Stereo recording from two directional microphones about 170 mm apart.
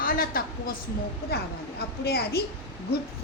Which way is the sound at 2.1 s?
70° left (ahead or behind).